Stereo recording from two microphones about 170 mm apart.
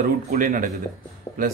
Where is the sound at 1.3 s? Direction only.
25° left (ahead or behind).